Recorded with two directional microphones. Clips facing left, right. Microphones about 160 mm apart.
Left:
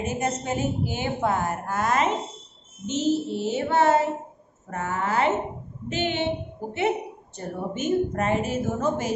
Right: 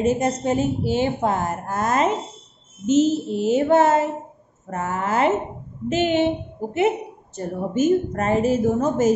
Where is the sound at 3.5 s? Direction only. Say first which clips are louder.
Right 4 dB; 45° right (ahead or behind).